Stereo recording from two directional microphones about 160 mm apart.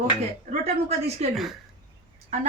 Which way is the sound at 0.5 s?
40° right (ahead or behind).